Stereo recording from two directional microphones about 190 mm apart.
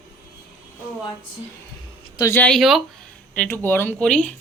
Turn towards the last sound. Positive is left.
turn(degrees=5)  # may be behind; listen again after turning